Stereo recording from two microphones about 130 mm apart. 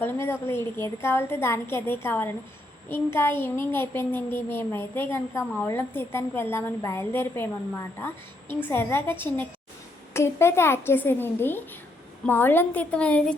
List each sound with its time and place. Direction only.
0.0 s a woman's voice: 20° left (ahead or behind)